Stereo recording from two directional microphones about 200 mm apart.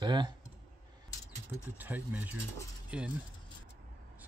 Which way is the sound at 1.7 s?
10° right (ahead or behind).